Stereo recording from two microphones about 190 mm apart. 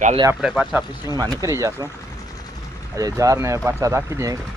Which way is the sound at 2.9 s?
15° right (ahead or behind).